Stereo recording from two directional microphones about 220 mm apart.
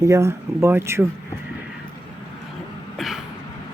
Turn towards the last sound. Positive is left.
turn(degrees=0)  # may be behind; listen again after turning